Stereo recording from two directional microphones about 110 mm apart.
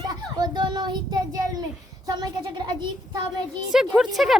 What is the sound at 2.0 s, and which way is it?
Speech, 40° right (ahead or behind).